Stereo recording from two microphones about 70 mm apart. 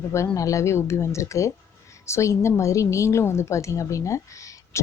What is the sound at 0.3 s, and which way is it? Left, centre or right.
A woman's voice, left.